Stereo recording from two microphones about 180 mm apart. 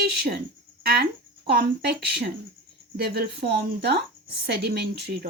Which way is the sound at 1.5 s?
65° right (ahead or behind).